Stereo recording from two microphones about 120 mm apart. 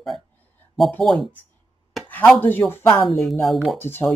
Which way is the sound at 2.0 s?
Centre (ahead or behind).